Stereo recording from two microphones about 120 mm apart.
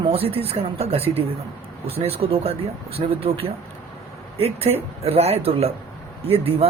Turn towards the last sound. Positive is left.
turn(degrees=-55)  # may be behind; listen again after turning